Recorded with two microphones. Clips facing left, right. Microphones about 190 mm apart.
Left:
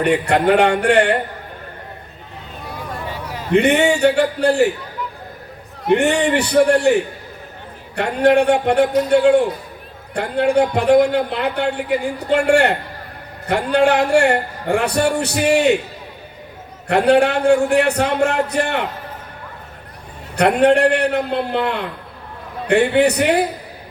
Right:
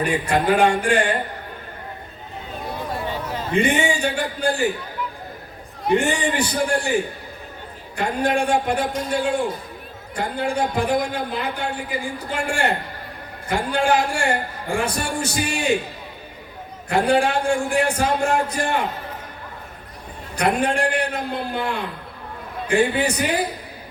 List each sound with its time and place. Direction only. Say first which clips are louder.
0.0 s a man's voice: left 5 dB; 65° left (ahead or behind)
3.5 s a man's voice: left 6 dB; 65° left (ahead or behind)
5.9 s a man's voice: left 5 dB; 65° left (ahead or behind)
16.9 s a man's voice: left 5 dB; 65° left (ahead or behind)
20.3 s a man's voice: left 7 dB; 65° left (ahead or behind)